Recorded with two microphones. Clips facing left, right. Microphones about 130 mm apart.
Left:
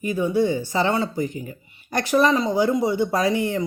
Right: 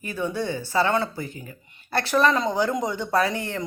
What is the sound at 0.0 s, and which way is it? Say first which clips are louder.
Speech: left 7 dB; 15° left (ahead or behind).